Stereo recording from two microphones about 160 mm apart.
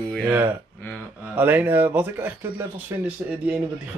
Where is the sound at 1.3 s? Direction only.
10° right (ahead or behind).